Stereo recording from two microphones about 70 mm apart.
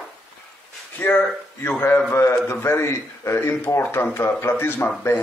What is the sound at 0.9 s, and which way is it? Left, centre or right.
A man's voice, left.